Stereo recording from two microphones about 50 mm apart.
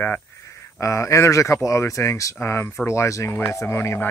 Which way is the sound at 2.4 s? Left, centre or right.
Left.